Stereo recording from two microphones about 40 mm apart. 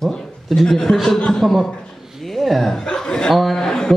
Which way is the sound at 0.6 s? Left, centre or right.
Centre.